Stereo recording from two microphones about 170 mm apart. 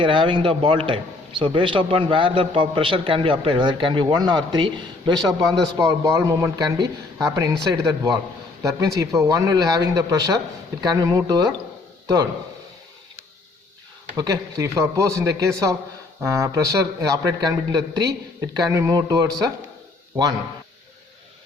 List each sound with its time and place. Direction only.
0.0 s a man's voice: 30° right (ahead or behind)
14.2 s a man's voice: 20° right (ahead or behind)